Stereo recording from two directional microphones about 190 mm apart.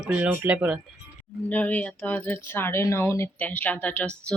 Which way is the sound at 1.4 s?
10° left (ahead or behind).